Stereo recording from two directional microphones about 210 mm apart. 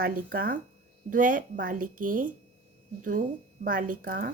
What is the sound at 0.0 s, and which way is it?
A woman's voice, 45° right (ahead or behind).